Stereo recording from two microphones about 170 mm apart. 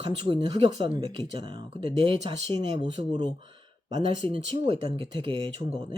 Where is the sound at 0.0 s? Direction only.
30° right (ahead or behind).